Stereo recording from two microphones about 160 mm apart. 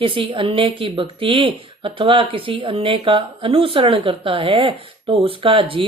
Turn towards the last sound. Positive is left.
turn(degrees=-35)  # may be behind; listen again after turning